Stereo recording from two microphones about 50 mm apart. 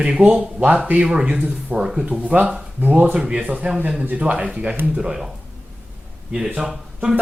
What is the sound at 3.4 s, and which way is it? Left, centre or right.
Speech, right.